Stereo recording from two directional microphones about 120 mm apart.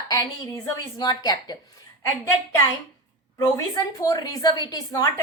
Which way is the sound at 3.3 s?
25° left (ahead or behind).